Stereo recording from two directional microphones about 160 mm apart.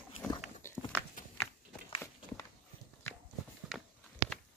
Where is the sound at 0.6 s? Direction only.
15° left (ahead or behind).